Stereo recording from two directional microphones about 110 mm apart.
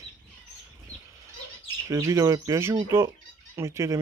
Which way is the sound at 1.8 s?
30° right (ahead or behind).